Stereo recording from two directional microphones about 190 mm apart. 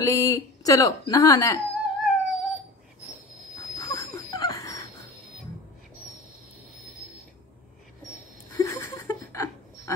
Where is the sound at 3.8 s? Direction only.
15° left (ahead or behind).